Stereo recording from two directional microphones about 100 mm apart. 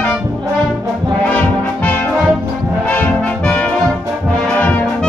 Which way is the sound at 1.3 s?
15° left (ahead or behind).